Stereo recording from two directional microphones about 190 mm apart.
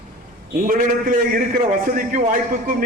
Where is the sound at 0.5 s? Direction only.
45° right (ahead or behind).